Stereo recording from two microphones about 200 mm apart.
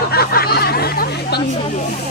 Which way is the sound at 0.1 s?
50° left (ahead or behind).